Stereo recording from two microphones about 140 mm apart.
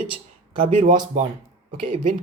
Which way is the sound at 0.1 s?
40° right (ahead or behind).